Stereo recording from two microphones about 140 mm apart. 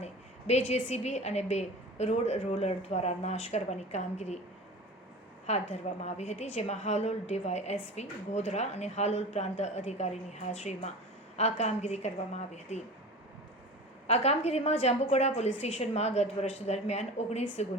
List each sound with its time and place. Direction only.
0.0 s a woman's voice: 50° left (ahead or behind)
5.5 s a woman's voice: 50° left (ahead or behind)
14.1 s a woman's voice: 50° left (ahead or behind)